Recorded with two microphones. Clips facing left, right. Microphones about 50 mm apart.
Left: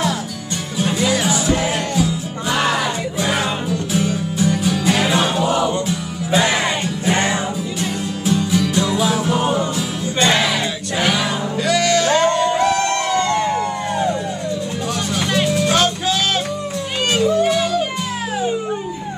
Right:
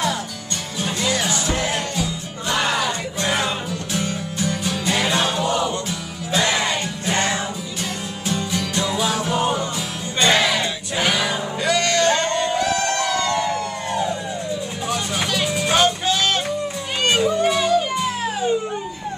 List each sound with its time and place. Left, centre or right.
0.7 s music: centre
8.3 s music: centre
12.5 s a sound: left
15.4 s music: centre